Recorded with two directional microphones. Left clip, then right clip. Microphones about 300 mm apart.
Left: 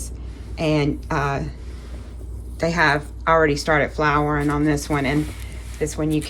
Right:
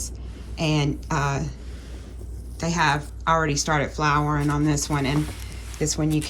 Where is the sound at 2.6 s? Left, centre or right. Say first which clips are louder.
Left 4 dB; centre.